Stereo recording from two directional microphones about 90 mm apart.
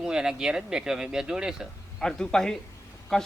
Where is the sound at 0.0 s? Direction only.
10° right (ahead or behind).